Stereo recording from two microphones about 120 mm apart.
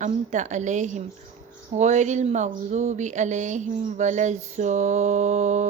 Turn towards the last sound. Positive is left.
turn(degrees=-75)  # may be behind; listen again after turning